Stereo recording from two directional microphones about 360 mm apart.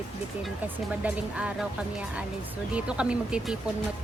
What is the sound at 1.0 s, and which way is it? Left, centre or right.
Speech, centre.